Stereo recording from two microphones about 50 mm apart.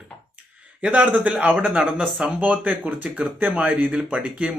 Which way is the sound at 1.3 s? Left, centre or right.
Right.